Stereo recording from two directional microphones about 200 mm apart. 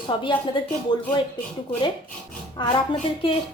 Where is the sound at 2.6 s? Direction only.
25° left (ahead or behind).